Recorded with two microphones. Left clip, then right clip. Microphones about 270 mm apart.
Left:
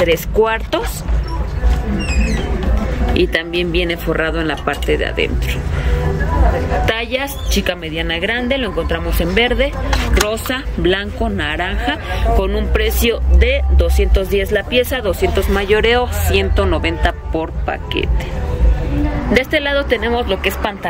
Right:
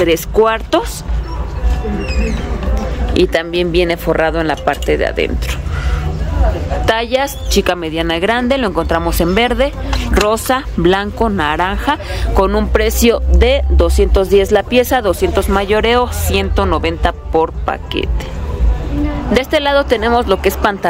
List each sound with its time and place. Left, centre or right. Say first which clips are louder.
0.0 s a woman's voice: right 2 dB; centre
3.2 s a woman's voice: right 4 dB; centre
6.9 s a woman's voice: right 4 dB; centre
19.3 s a woman's voice: right 3 dB; centre